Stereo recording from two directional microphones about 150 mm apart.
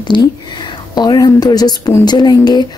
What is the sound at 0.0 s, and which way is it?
Speech, 30° left (ahead or behind).